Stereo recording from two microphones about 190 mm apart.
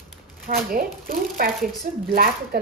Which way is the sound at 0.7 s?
50° right (ahead or behind).